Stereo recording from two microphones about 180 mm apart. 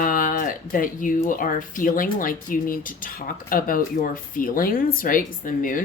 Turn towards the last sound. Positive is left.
turn(degrees=50)  # may be behind; listen again after turning